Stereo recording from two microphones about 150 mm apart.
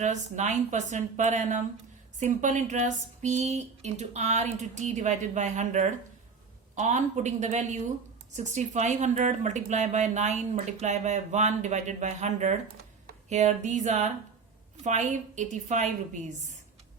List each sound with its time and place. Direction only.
0.0 s speech: 50° right (ahead or behind)